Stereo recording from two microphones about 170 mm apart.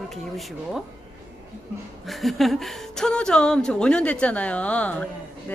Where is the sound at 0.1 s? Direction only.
Centre (ahead or behind).